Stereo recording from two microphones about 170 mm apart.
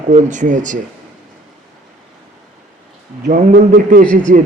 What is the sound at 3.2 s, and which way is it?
A man's voice, 55° right (ahead or behind).